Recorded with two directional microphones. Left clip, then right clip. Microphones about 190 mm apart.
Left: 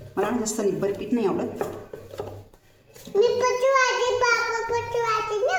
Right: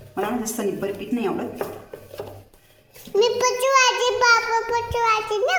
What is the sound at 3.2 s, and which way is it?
A child's voice, 35° right (ahead or behind).